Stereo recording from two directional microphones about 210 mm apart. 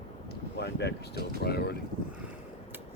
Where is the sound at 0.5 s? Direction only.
55° left (ahead or behind).